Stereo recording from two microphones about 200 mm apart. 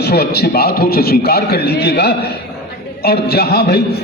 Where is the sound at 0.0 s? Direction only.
55° left (ahead or behind).